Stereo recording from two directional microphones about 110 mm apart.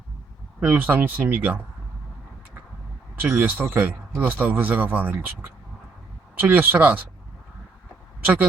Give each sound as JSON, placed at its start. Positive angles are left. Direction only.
{"t": 0.6, "sound": "speech", "side_deg": -15}
{"t": 3.2, "sound": "speech", "side_deg": -20}